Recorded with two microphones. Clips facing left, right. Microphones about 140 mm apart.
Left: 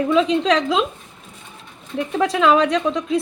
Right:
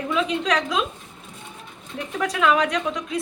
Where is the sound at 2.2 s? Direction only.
30° left (ahead or behind).